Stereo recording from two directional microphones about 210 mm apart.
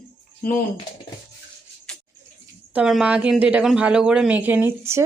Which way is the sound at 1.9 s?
5° left (ahead or behind).